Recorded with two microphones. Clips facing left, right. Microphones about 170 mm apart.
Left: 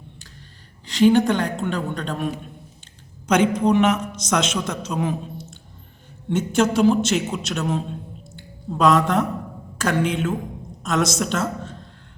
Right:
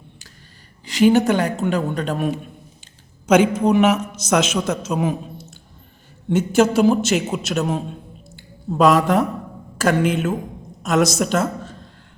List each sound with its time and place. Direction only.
0.9 s a man's voice: 5° right (ahead or behind)
6.3 s a man's voice: 10° right (ahead or behind)